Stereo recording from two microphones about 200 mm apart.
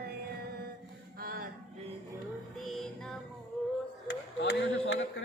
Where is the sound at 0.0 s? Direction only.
50° right (ahead or behind).